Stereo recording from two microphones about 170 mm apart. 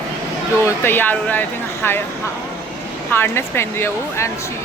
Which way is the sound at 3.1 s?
15° left (ahead or behind).